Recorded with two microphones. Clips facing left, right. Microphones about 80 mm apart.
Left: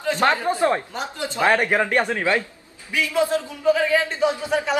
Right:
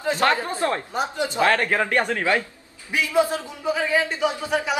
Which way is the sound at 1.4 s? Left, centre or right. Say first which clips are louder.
Left 2 dB; centre.